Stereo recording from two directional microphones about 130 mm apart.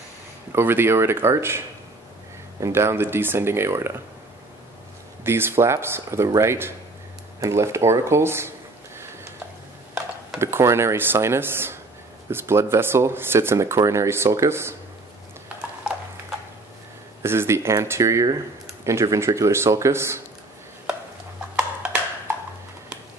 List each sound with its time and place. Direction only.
0.5 s speech: 15° right (ahead or behind)
2.6 s speech: 20° right (ahead or behind)
5.2 s speech: 20° right (ahead or behind)
10.4 s speech: 20° right (ahead or behind)
15.4 s clip-clop: 5° right (ahead or behind)
17.2 s speech: 20° right (ahead or behind)